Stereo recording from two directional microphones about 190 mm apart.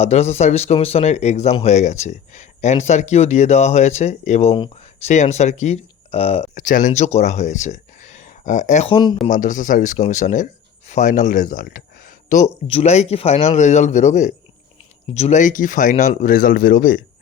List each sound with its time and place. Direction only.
0.0 s speech: 35° left (ahead or behind)